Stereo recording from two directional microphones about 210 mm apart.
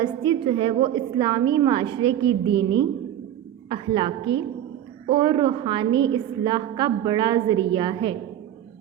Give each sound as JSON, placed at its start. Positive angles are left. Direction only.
{"t": 0.0, "sound": "a woman's voice", "side_deg": -20}